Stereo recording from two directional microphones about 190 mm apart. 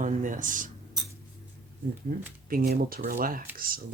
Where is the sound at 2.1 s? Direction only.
50° right (ahead or behind).